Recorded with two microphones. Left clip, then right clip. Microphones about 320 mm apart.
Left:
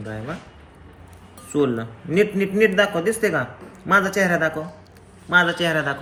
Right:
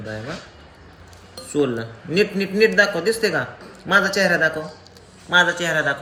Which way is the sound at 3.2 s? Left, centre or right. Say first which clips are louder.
Even; centre.